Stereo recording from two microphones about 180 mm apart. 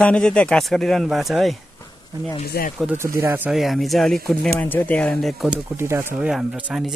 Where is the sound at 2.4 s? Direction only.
60° left (ahead or behind).